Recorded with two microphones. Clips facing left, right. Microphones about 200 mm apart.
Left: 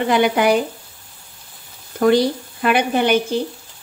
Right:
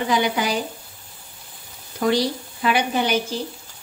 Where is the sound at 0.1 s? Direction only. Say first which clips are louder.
Left 7 dB; 60° left (ahead or behind).